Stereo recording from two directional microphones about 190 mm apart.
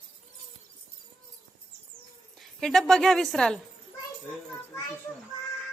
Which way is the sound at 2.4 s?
Centre (ahead or behind).